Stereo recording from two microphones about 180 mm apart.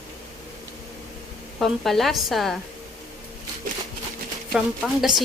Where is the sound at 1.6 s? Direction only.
Centre (ahead or behind).